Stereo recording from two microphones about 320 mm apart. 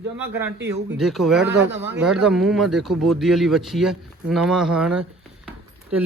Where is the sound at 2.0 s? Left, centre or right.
Centre.